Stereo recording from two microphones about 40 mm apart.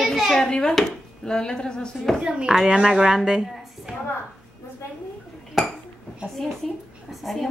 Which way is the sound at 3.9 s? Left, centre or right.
Right.